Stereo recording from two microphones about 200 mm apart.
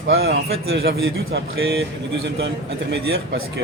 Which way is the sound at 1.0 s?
80° right.